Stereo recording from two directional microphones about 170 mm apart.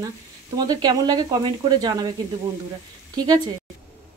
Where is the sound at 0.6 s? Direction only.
25° right (ahead or behind).